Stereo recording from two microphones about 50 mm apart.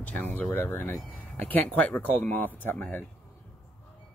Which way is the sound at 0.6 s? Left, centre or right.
Left.